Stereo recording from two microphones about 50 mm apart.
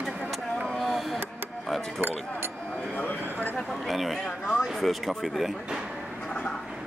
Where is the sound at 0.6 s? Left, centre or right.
Centre.